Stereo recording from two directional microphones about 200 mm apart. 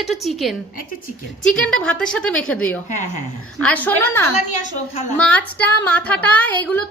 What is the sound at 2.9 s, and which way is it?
Speech, 35° left (ahead or behind).